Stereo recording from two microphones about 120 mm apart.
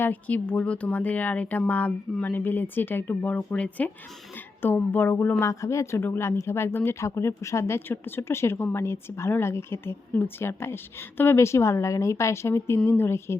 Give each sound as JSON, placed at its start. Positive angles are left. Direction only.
{"t": 0.0, "sound": "a woman's voice", "side_deg": 15}